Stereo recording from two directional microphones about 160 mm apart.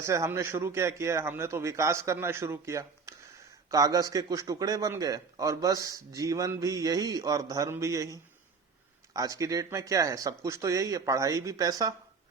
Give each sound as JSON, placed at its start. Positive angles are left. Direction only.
{"t": 0.0, "sound": "a man's voice", "side_deg": -20}